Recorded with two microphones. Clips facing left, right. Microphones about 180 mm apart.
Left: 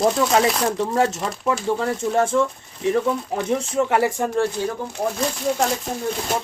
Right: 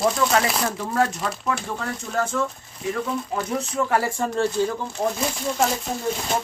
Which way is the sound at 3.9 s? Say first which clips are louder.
Left 2 dB; 15° left (ahead or behind).